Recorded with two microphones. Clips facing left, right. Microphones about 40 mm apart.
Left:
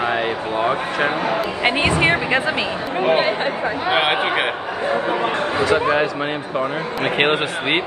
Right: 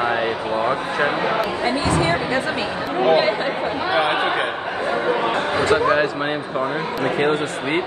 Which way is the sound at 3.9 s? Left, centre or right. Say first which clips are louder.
Even; left.